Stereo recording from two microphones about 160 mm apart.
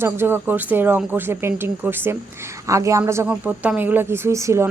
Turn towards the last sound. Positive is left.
turn(degrees=-20)  # may be behind; listen again after turning